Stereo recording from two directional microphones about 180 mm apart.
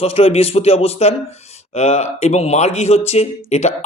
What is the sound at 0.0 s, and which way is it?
Speech, 35° left (ahead or behind).